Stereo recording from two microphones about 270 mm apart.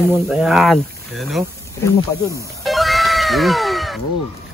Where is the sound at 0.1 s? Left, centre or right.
Centre.